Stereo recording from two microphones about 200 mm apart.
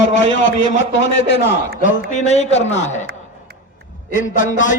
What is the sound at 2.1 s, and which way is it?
Speech, 35° left (ahead or behind).